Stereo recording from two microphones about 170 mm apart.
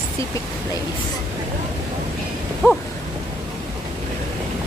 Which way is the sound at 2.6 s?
10° left (ahead or behind).